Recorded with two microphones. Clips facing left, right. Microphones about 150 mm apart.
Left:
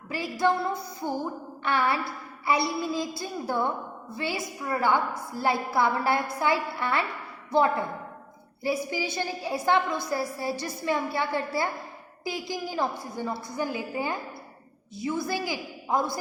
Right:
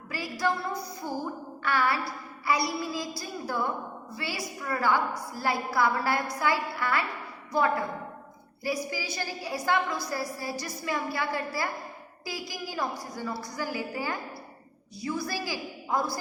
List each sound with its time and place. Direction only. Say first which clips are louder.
0.1 s music: left 4 dB; 20° left (ahead or behind)
8.6 s music: left 3 dB; 25° left (ahead or behind)